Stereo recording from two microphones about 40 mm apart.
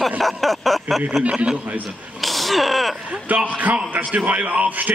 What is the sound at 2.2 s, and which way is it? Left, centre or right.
Sneeze, centre.